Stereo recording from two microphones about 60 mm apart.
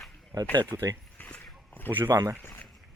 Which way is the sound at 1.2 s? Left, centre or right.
Left.